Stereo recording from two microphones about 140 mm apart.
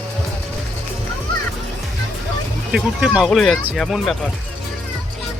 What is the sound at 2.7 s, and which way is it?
Speech, 5° right (ahead or behind).